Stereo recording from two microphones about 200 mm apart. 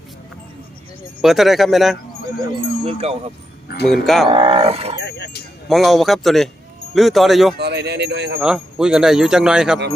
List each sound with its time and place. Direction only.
1.2 s speech: centre (ahead or behind)
2.8 s speech: 30° right (ahead or behind)
3.8 s speech: centre (ahead or behind)
4.3 s speech: 25° right (ahead or behind)
4.9 s speech: 55° left (ahead or behind)
5.6 s speech: centre (ahead or behind)
7.6 s speech: 55° right (ahead or behind)
8.4 s speech: 5° right (ahead or behind)